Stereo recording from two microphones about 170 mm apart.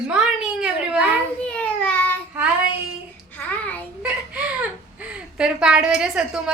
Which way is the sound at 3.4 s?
10° left (ahead or behind).